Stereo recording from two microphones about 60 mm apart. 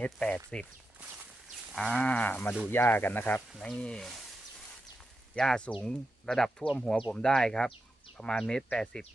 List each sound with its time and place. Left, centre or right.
0.5 s speech: centre
1.7 s livestock: centre
2.0 s speech: centre
3.5 s speech: centre
3.8 s speech: centre
5.3 s speech: centre